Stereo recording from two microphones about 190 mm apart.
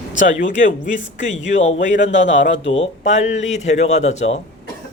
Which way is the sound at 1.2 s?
75° left (ahead or behind).